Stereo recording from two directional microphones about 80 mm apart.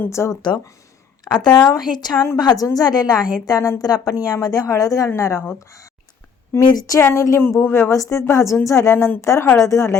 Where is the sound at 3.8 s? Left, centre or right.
Left.